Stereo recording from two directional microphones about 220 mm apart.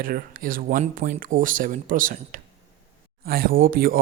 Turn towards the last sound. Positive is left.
turn(degrees=-40)  # may be behind; listen again after turning